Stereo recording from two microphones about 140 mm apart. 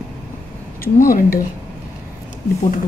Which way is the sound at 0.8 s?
90° left.